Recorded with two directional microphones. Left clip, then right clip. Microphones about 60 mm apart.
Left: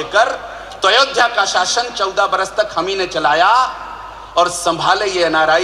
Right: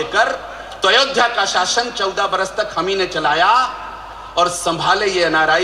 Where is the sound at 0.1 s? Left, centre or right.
Left.